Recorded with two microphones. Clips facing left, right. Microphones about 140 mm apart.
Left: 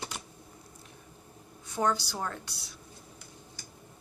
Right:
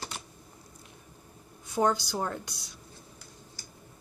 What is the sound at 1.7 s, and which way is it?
Speech, 15° right (ahead or behind).